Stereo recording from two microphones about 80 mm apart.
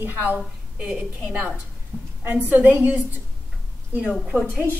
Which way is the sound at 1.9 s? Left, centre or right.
Centre.